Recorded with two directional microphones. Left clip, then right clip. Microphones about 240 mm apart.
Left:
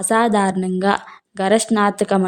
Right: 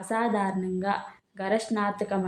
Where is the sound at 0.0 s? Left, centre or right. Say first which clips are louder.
Left 11 dB; left.